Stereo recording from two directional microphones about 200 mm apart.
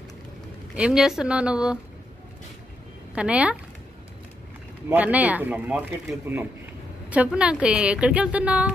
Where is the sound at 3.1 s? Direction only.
5° right (ahead or behind).